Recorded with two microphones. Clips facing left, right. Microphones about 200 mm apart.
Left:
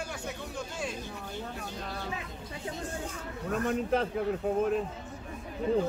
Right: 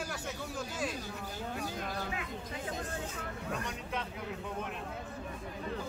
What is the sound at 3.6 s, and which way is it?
Speech, 45° left (ahead or behind).